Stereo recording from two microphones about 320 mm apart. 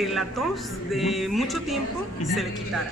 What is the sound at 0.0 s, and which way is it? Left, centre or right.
Speech, centre.